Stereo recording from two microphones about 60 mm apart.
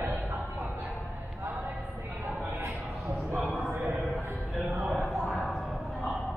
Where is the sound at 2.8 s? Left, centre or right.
Centre.